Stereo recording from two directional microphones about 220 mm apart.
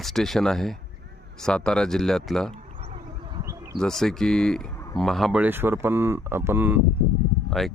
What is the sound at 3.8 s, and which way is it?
Speech, centre (ahead or behind).